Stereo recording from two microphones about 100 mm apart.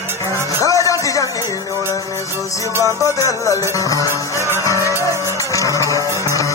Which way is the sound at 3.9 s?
35° left (ahead or behind).